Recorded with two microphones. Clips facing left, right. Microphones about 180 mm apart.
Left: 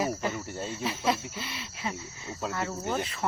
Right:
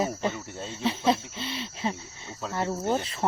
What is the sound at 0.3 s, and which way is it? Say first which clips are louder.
Cricket: left 2 dB; 5° left (ahead or behind).